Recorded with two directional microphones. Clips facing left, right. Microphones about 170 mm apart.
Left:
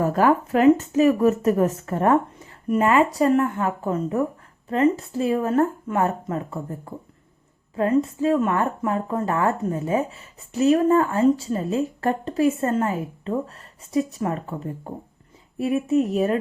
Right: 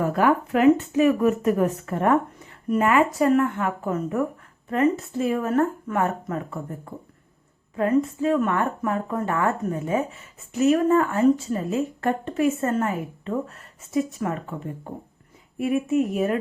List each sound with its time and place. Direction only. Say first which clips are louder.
0.0 s a woman's voice: left 2 dB; 40° left (ahead or behind)
7.8 s a woman's voice: left 1 dB; 30° left (ahead or behind)